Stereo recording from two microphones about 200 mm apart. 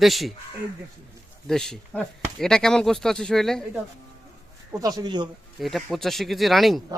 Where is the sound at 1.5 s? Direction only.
Centre (ahead or behind).